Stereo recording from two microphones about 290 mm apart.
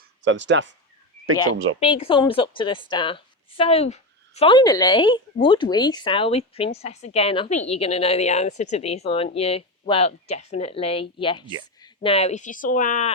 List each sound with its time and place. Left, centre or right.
0.3 s speech: right
1.8 s a woman's voice: centre